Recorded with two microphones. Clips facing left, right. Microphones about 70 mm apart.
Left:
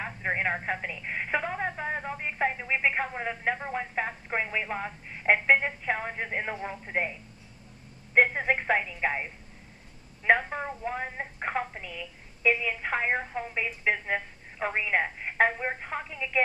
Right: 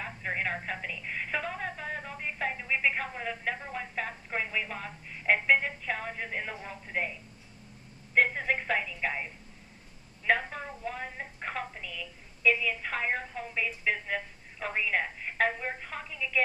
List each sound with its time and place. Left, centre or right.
0.0 s speech: left